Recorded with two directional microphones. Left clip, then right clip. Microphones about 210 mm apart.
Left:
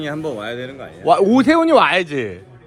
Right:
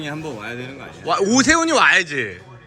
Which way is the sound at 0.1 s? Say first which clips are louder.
Left 5 dB; centre (ahead or behind).